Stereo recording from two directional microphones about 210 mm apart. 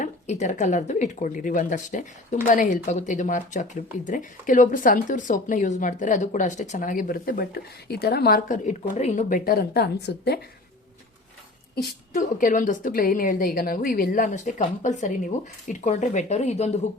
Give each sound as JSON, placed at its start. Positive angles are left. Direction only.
{"t": 0.0, "sound": "speech", "side_deg": 35}
{"t": 11.7, "sound": "speech", "side_deg": 45}